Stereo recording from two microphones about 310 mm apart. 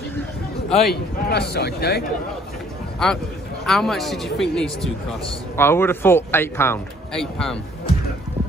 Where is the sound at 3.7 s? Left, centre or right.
Centre.